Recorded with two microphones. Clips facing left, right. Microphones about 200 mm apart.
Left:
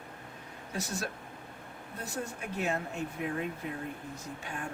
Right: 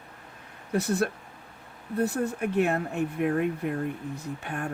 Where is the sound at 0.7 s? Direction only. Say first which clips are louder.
Right 11 dB; 60° right (ahead or behind).